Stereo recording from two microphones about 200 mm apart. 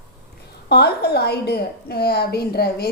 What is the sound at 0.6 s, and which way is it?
A woman's voice, 55° left (ahead or behind).